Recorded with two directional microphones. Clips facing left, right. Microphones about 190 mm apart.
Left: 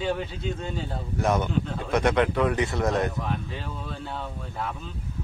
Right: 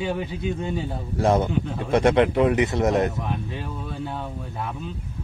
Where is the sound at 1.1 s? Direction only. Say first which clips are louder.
Right 4 dB; 30° right (ahead or behind).